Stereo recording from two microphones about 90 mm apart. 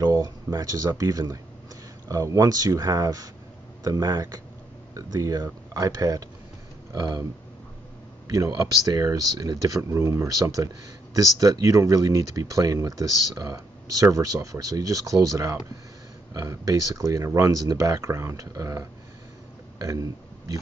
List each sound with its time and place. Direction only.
0.0 s speech: 40° right (ahead or behind)
8.3 s speech: 40° right (ahead or behind)
16.4 s speech: 40° right (ahead or behind)
19.9 s a man's voice: 40° right (ahead or behind)